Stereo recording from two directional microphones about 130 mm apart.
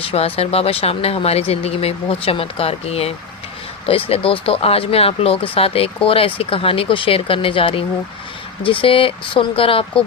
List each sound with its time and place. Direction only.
0.0 s speech: 50° left (ahead or behind)